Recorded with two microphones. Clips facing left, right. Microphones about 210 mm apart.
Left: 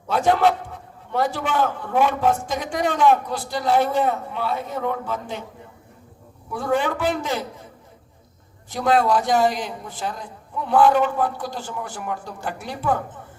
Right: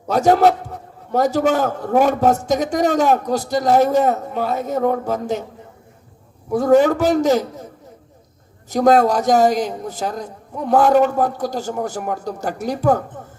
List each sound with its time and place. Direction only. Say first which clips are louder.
0.1 s a man's voice: right 5 dB; 40° right (ahead or behind)
6.5 s a man's voice: right 9 dB; 40° right (ahead or behind)
8.7 s a man's voice: right 5 dB; 40° right (ahead or behind)